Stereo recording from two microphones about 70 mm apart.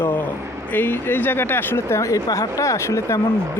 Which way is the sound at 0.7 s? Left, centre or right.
Left.